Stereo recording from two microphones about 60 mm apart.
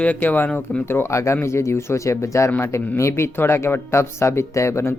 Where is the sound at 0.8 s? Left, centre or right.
Left.